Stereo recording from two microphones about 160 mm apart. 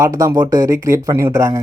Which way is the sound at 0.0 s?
20° right (ahead or behind).